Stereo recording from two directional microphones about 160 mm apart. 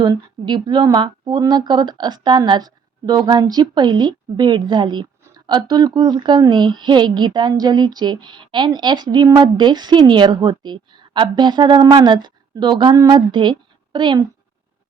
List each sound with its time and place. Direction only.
0.0 s a woman's voice: 25° right (ahead or behind)